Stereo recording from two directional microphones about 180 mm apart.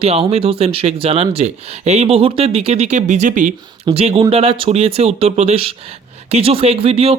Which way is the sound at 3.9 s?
35° right (ahead or behind).